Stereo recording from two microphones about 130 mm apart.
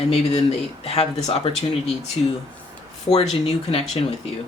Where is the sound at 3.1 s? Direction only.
50° left (ahead or behind).